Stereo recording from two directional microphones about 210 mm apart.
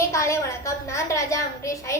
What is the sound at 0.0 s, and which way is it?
A child's voice, 15° left (ahead or behind).